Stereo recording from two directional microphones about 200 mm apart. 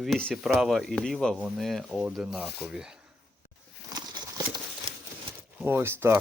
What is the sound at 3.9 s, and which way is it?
Clip-clop, 20° right (ahead or behind).